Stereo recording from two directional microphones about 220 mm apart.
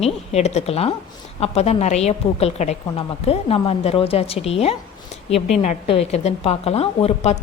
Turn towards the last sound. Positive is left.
turn(degrees=30)  # may be behind; listen again after turning